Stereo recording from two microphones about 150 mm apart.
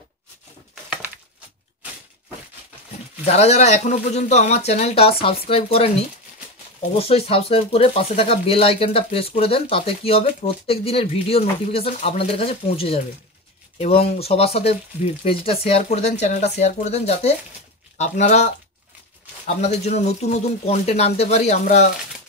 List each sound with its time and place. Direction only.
3.3 s speech: 45° left (ahead or behind)
7.0 s speech: 40° left (ahead or behind)